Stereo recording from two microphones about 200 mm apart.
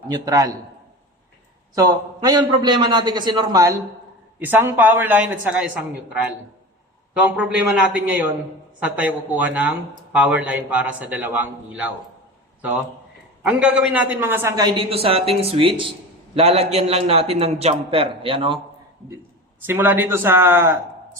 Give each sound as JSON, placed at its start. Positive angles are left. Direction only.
{"t": 0.1, "sound": "a man's voice", "side_deg": -15}
{"t": 1.7, "sound": "a man's voice", "side_deg": -20}
{"t": 7.1, "sound": "a man's voice", "side_deg": -5}
{"t": 13.4, "sound": "a man's voice", "side_deg": -5}
{"t": 19.6, "sound": "a man's voice", "side_deg": -10}